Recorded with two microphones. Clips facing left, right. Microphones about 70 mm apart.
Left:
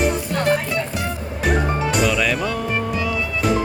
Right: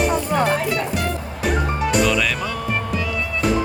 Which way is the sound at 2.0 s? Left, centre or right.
Centre.